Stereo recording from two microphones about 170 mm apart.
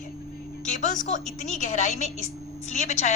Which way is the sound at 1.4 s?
45° left (ahead or behind).